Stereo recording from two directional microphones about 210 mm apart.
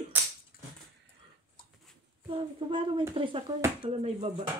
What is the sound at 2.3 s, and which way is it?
Speech, 25° right (ahead or behind).